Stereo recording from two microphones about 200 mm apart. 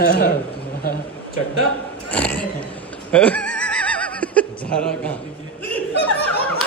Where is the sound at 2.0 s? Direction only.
5° left (ahead or behind).